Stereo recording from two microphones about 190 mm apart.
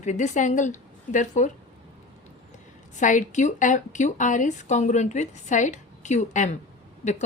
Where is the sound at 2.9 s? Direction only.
40° left (ahead or behind).